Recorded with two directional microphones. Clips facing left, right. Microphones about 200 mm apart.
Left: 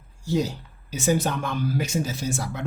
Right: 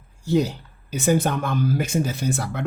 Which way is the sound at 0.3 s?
60° right (ahead or behind).